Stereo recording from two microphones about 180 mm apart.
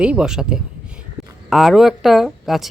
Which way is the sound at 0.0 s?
5° right (ahead or behind).